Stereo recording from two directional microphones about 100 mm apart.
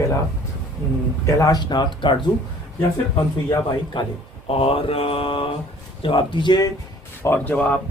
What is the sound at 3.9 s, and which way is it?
Speech, 55° left (ahead or behind).